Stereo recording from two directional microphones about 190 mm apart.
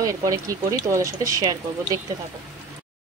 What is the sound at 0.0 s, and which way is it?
Speech, 15° right (ahead or behind).